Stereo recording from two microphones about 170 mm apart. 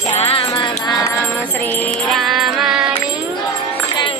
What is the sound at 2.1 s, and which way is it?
Music, centre (ahead or behind).